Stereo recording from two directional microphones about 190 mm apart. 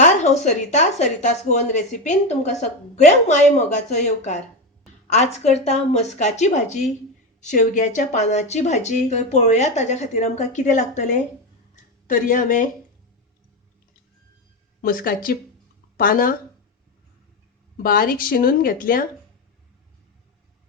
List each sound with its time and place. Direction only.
0.0 s speech: 40° left (ahead or behind)
14.8 s speech: 50° left (ahead or behind)
17.8 s speech: 50° left (ahead or behind)